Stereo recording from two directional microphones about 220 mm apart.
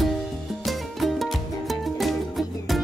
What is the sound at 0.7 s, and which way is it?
Music, centre (ahead or behind).